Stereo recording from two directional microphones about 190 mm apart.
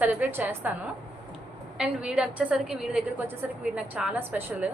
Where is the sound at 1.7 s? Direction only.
5° right (ahead or behind).